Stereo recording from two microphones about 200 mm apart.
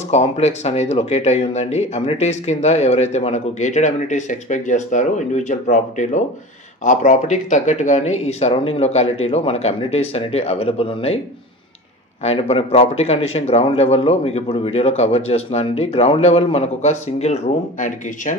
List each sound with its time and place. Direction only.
0.1 s a man's voice: 35° left (ahead or behind)
12.2 s a man's voice: 30° left (ahead or behind)